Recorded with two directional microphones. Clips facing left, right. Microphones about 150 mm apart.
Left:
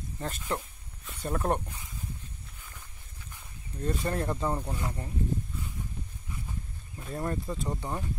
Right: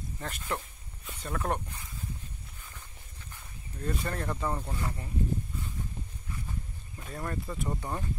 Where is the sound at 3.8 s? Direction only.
25° left (ahead or behind).